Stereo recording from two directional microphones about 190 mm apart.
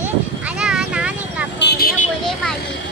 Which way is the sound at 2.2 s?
5° left (ahead or behind).